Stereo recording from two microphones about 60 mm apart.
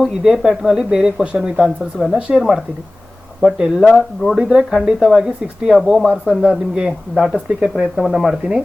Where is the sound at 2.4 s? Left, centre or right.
Centre.